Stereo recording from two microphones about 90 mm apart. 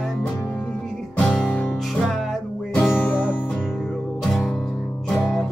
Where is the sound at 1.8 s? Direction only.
Centre (ahead or behind).